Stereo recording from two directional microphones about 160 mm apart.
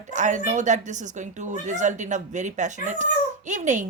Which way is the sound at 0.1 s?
50° right (ahead or behind).